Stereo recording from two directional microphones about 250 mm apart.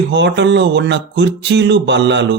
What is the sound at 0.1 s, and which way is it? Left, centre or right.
Speech, right.